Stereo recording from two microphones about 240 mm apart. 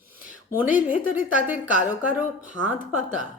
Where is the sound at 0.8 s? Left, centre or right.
Centre.